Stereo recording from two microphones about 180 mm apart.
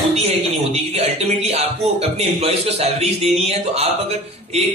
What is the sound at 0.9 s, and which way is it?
Speech, 35° right (ahead or behind).